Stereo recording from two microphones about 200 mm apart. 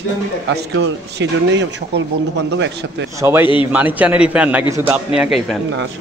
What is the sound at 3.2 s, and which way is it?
A man's voice, 10° right (ahead or behind).